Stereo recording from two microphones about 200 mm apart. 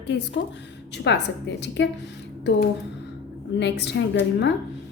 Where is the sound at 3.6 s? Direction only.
60° left (ahead or behind).